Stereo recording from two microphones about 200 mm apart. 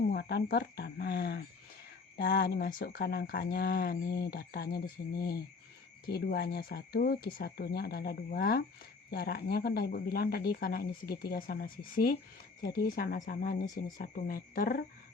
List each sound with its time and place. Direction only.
0.1 s speech: 55° left (ahead or behind)